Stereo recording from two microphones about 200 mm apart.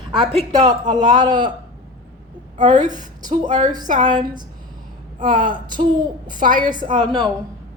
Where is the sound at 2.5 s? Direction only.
40° right (ahead or behind).